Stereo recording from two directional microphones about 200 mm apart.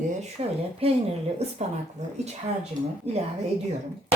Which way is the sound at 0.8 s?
30° right (ahead or behind).